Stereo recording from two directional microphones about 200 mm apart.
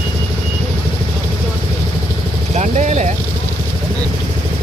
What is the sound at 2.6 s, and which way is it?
Vehicle, 35° right (ahead or behind).